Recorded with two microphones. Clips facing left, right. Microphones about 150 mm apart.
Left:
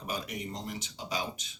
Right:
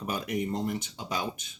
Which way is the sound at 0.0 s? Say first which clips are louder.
Right 6 dB; 50° right (ahead or behind).